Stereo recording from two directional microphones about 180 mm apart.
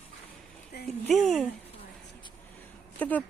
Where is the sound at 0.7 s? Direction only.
60° left (ahead or behind).